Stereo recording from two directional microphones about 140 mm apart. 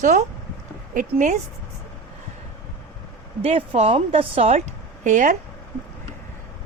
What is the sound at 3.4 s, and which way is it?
A woman's voice, 50° right (ahead or behind).